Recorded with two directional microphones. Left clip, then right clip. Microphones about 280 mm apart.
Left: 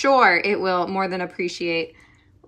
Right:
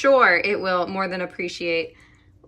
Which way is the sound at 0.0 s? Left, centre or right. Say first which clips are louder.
Even; centre.